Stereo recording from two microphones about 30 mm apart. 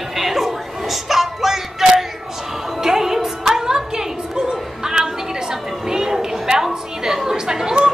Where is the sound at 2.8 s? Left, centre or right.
Centre.